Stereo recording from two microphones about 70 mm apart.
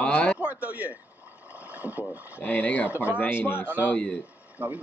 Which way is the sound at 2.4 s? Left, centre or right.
Left.